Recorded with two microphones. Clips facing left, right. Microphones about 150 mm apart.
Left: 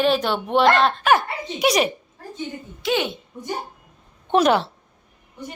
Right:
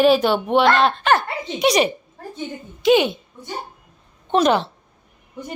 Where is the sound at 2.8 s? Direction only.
15° right (ahead or behind).